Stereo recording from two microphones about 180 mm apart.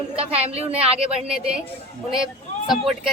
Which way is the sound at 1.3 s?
5° right (ahead or behind).